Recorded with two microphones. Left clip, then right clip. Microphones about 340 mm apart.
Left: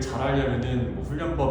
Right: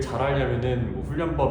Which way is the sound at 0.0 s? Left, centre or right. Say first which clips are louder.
Right 1 dB; right.